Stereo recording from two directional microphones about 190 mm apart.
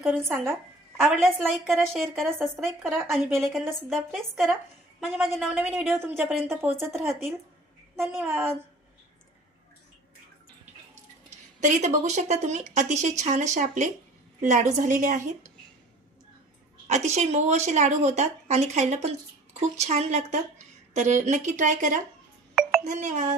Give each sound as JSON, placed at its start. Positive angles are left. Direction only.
{"t": 0.0, "sound": "a woman's voice", "side_deg": -10}
{"t": 1.0, "sound": "a woman's voice", "side_deg": 0}
{"t": 3.2, "sound": "a woman's voice", "side_deg": -10}
{"t": 3.8, "sound": "a woman's voice", "side_deg": 0}
{"t": 4.9, "sound": "a woman's voice", "side_deg": -10}
{"t": 7.1, "sound": "a woman's voice", "side_deg": 0}
{"t": 11.3, "sound": "a woman's voice", "side_deg": -40}
{"t": 16.8, "sound": "speech", "side_deg": -35}